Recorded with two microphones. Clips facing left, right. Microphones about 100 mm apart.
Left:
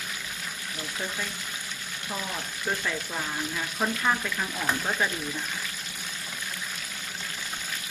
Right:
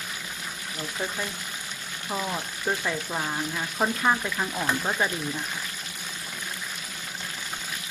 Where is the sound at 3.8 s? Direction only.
20° right (ahead or behind).